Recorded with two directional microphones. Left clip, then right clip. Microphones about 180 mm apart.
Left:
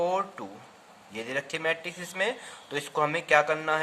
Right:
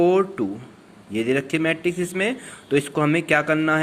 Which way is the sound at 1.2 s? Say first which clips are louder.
Right 7 dB; 10° right (ahead or behind).